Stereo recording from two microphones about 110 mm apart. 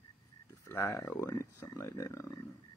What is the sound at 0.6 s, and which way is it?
Speech, 20° left (ahead or behind).